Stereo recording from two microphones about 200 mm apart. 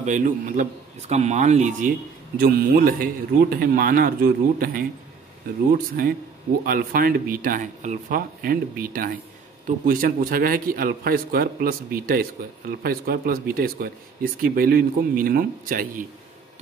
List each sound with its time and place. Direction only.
0.0 s a man's voice: 40° right (ahead or behind)